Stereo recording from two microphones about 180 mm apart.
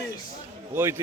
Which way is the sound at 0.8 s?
15° right (ahead or behind).